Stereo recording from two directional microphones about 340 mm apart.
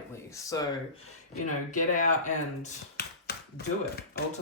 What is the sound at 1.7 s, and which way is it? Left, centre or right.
Speech, left.